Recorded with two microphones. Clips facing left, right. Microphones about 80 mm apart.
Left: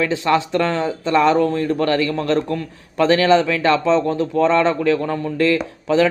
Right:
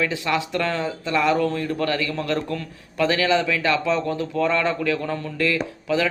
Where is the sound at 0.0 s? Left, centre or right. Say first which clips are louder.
Left 6 dB; left.